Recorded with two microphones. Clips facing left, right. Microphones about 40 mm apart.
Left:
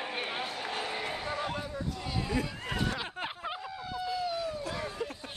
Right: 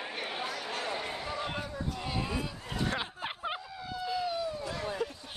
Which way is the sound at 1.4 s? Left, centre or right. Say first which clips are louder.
Left 1 dB; centre.